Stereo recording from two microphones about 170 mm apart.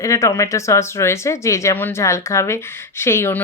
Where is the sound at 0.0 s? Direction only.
20° left (ahead or behind).